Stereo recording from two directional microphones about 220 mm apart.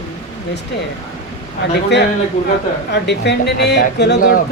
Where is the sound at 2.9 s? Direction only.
50° left (ahead or behind).